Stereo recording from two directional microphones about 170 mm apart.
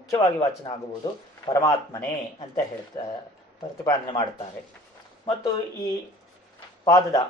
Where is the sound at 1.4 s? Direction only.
20° left (ahead or behind).